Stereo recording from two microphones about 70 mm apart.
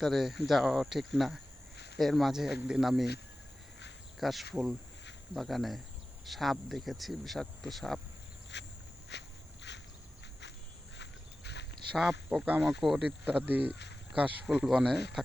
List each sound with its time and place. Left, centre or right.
0.0 s speech: centre
4.2 s speech: centre
11.9 s speech: centre
12.6 s speech: centre
13.0 s speech: centre